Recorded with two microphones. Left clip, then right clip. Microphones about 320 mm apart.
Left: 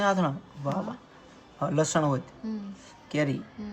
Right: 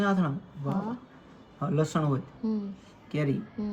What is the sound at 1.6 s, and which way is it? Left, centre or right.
Speech, left.